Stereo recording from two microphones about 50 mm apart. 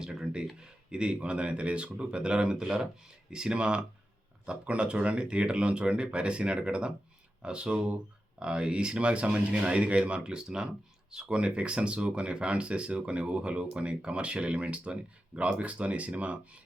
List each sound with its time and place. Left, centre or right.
0.0 s speech: centre